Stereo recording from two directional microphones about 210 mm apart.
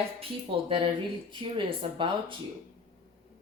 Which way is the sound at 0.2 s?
25° right (ahead or behind).